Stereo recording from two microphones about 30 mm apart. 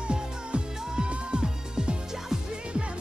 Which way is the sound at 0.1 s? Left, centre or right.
Right.